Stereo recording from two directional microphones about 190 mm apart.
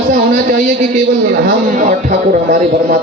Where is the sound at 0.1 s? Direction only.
50° right (ahead or behind).